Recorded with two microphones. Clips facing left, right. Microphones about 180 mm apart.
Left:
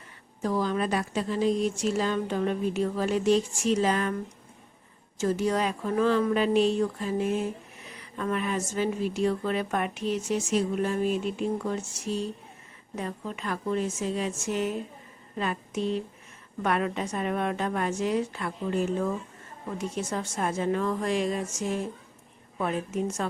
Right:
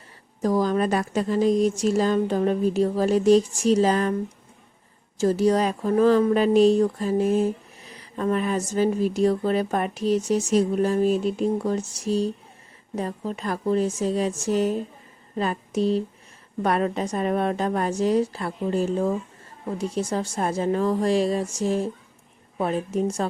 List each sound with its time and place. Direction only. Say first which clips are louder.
0.4 s speech: right 5 dB; 40° right (ahead or behind)